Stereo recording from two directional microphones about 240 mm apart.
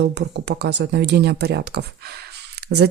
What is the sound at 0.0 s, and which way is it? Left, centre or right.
Speech, right.